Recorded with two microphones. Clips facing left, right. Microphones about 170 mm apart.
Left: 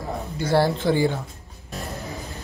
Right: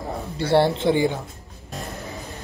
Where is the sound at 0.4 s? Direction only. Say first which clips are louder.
Right 2 dB; 25° right (ahead or behind).